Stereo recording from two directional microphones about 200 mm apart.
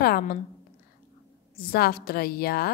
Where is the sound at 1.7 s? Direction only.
50° left (ahead or behind).